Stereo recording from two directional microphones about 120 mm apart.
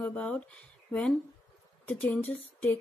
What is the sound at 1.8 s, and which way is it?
Speech, 15° left (ahead or behind).